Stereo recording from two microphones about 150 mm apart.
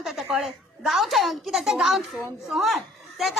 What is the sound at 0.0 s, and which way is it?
A woman's voice, centre (ahead or behind).